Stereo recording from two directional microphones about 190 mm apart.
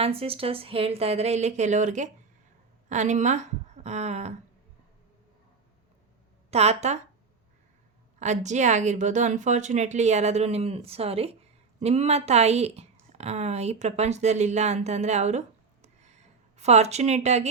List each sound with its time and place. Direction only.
0.0 s a woman's voice: 30° right (ahead or behind)
6.5 s a woman's voice: 35° right (ahead or behind)
8.2 s a woman's voice: 40° right (ahead or behind)